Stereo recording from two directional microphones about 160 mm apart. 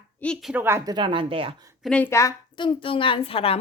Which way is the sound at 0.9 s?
30° right (ahead or behind).